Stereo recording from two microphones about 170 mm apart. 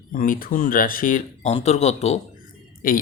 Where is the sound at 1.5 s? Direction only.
40° left (ahead or behind).